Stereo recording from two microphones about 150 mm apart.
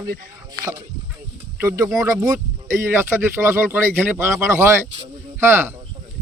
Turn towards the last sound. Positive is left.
turn(degrees=-15)  # may be behind; listen again after turning